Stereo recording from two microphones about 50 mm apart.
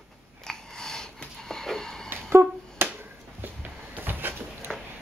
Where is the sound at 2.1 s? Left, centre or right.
Right.